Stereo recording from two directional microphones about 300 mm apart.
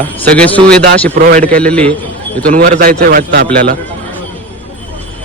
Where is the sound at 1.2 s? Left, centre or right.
Right.